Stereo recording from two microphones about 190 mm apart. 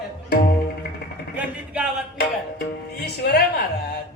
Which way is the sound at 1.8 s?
5° right (ahead or behind).